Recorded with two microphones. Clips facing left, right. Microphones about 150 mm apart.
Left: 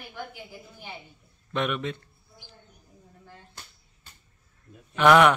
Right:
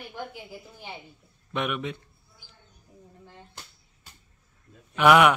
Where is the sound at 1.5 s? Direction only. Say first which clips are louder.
Left 1 dB; 10° right (ahead or behind).